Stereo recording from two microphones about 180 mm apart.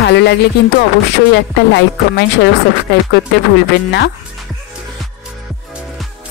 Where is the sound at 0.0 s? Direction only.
70° left (ahead or behind).